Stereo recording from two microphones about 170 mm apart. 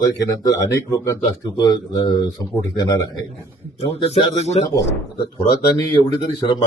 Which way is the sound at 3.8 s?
35° left (ahead or behind).